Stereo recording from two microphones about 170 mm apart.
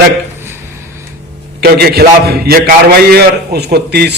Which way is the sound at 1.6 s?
65° right (ahead or behind).